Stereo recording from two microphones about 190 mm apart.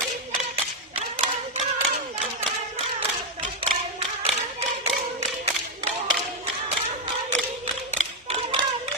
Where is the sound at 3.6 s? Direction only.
30° right (ahead or behind).